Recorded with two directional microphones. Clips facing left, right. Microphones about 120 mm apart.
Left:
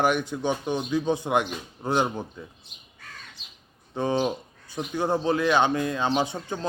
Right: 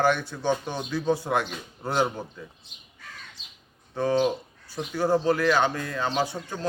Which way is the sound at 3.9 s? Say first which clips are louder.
Right 2 dB; 20° left (ahead or behind).